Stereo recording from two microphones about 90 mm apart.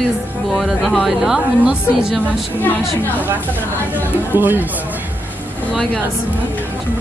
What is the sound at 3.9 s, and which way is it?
Speech, 20° right (ahead or behind).